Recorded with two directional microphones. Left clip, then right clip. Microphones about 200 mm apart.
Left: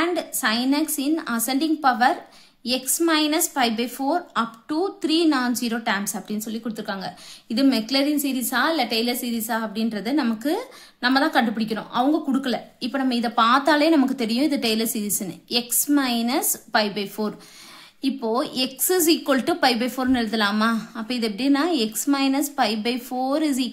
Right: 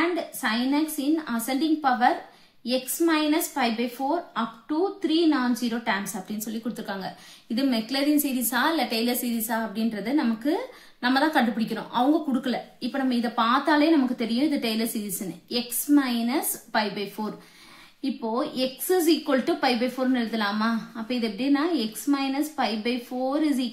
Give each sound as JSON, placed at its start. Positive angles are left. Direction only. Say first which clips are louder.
{"t": 0.1, "sound": "a woman's voice", "louder": "left 4 dB", "side_deg": 40}